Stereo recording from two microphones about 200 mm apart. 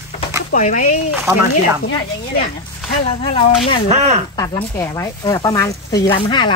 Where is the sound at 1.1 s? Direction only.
10° right (ahead or behind).